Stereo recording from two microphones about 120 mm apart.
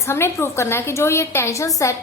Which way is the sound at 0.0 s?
20° left (ahead or behind).